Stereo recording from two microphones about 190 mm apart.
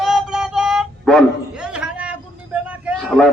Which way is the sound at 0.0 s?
Centre (ahead or behind).